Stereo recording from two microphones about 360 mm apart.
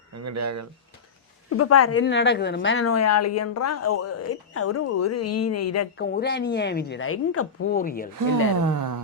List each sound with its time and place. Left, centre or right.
0.1 s speech: right
1.5 s a woman's voice: left
6.0 s speech: left
7.7 s speech: left
8.6 s music: right